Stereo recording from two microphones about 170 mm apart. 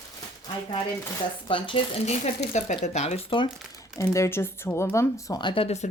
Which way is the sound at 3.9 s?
15° left (ahead or behind).